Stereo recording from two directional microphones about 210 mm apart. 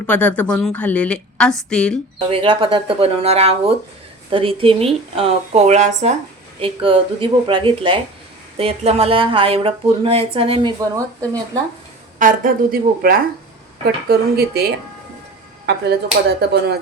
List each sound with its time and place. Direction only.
0.1 s a woman's voice: 5° left (ahead or behind)
2.1 s speech: 25° right (ahead or behind)
12.2 s a woman's voice: 40° right (ahead or behind)